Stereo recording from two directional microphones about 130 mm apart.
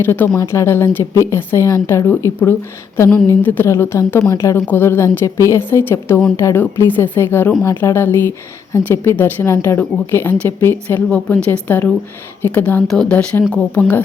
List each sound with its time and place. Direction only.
0.0 s a woman's voice: 15° left (ahead or behind)